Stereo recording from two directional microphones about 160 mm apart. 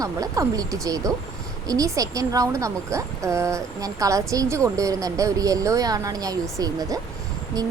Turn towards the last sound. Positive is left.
turn(degrees=-25)  # may be behind; listen again after turning